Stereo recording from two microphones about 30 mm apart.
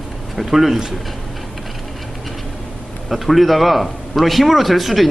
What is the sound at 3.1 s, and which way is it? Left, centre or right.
A man's voice, centre.